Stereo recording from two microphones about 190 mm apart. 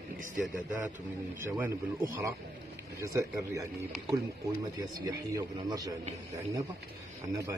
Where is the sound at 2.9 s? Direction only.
15° right (ahead or behind).